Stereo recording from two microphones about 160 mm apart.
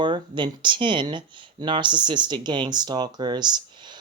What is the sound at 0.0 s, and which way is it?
Speech, 30° right (ahead or behind).